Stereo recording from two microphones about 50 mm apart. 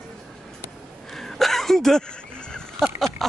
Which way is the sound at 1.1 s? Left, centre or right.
Centre.